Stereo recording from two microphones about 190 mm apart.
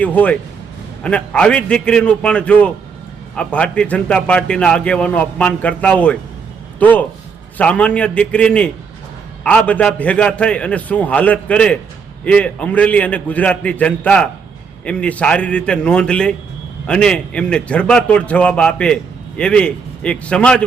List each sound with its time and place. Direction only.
0.0 s a man's voice: 10° left (ahead or behind)